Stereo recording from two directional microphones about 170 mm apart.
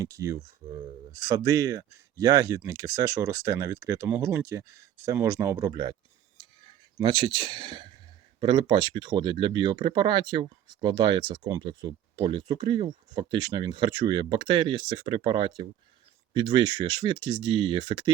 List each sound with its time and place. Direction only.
0.0 s speech: 20° right (ahead or behind)